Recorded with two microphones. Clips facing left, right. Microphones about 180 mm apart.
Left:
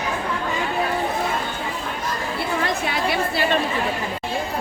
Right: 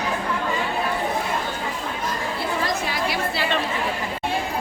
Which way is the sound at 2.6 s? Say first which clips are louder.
Left 2 dB; 55° left (ahead or behind).